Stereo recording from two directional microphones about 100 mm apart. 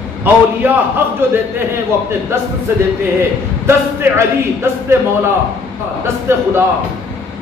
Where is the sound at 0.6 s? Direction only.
20° right (ahead or behind).